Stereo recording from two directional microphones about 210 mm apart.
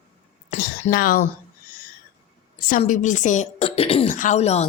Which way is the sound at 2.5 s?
40° left (ahead or behind).